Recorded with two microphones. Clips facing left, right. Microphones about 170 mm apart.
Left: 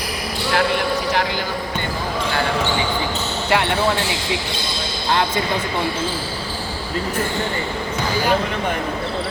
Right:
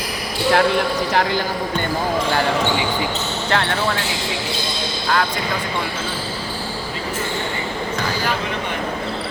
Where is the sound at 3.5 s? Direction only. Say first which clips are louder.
Left 2 dB; 15° left (ahead or behind).